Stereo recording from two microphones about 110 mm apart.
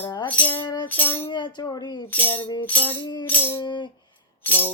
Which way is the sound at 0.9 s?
15° left (ahead or behind).